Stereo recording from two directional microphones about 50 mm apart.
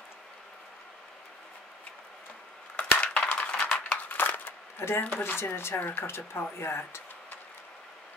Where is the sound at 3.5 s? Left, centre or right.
Centre.